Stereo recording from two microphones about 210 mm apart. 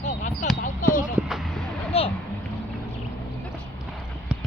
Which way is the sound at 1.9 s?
30° left (ahead or behind).